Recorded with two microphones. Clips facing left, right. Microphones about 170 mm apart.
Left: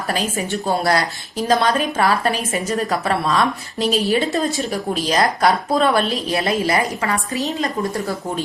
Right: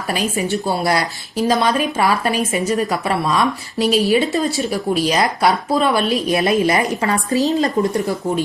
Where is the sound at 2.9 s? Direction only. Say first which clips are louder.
Right 1 dB; 15° right (ahead or behind).